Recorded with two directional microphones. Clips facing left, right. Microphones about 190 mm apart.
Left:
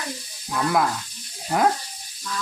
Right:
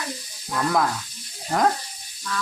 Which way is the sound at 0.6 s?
5° left (ahead or behind).